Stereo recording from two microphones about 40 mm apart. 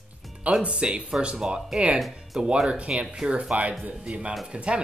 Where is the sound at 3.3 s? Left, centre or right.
Right.